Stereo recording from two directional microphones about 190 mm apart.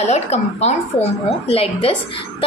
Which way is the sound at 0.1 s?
35° left (ahead or behind).